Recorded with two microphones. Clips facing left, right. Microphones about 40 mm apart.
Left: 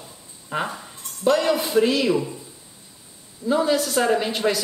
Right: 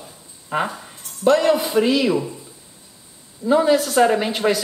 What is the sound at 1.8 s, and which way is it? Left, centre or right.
Speech, centre.